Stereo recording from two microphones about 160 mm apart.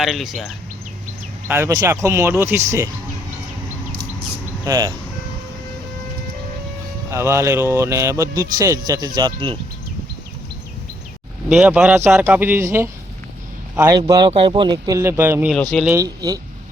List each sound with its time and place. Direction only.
0.0 s speech: centre (ahead or behind)
1.5 s a man's voice: 15° right (ahead or behind)
4.6 s speech: 25° right (ahead or behind)
7.1 s speech: 15° right (ahead or behind)
11.4 s a man's voice: 5° right (ahead or behind)
15.4 s speech: 5° left (ahead or behind)
15.9 s speech: 20° right (ahead or behind)